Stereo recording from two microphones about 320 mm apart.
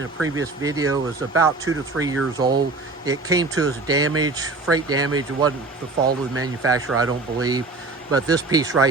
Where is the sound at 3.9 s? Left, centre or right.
Right.